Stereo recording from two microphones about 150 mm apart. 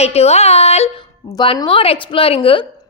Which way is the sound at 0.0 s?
45° left (ahead or behind).